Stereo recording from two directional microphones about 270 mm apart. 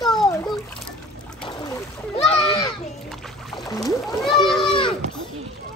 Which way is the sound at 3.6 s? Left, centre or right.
Centre.